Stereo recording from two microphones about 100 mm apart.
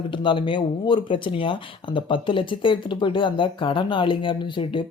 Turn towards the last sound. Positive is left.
turn(degrees=55)  # may be behind; listen again after turning